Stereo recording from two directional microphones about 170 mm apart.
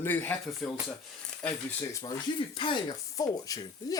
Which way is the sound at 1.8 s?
20° left (ahead or behind).